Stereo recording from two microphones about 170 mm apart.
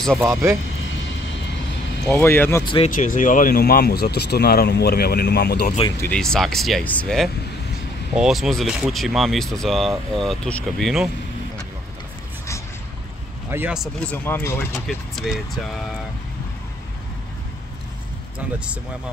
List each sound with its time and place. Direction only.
0.2 s speech: 10° right (ahead or behind)
2.0 s speech: 10° left (ahead or behind)
2.6 s speech: 30° left (ahead or behind)
2.9 s speech: 50° left (ahead or behind); by 5.8 s 65° left (ahead or behind)
6.0 s speech: 5° left (ahead or behind)
13.5 s speech: 10° right (ahead or behind)
13.7 s speech: 10° left (ahead or behind)
14.9 s speech: centre (ahead or behind)